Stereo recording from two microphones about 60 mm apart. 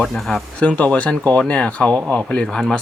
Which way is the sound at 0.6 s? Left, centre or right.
Left.